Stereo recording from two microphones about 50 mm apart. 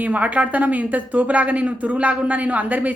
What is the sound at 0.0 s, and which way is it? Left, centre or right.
Speech, right.